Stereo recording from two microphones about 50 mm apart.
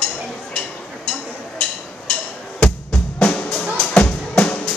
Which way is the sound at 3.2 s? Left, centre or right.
Left.